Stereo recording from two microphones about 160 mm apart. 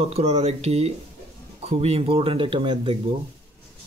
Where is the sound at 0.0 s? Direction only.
40° right (ahead or behind).